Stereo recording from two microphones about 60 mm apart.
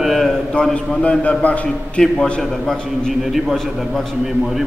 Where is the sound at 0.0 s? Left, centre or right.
Centre.